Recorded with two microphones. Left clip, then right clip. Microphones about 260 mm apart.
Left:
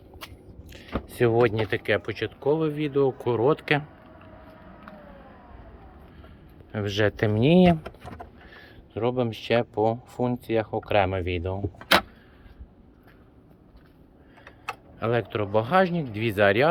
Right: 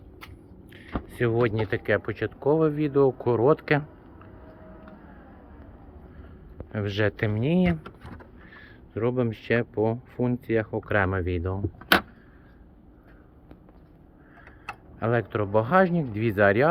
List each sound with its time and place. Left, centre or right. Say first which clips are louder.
0.7 s speech: left 2 dB; centre
6.7 s speech: left 2 dB; centre; by 8.3 s left
8.4 s speech: even; centre
14.4 s speech: left 4 dB; centre